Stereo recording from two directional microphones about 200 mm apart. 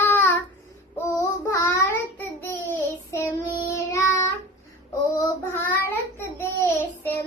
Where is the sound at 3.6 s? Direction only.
15° left (ahead or behind).